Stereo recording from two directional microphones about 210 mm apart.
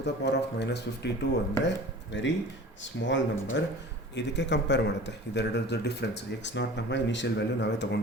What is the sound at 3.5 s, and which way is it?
Speech, 60° left (ahead or behind).